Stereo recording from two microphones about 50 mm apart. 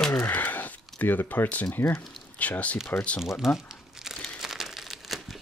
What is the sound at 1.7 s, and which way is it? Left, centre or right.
Speech, left.